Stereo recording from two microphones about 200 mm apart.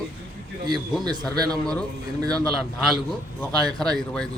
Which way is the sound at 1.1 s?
20° right (ahead or behind).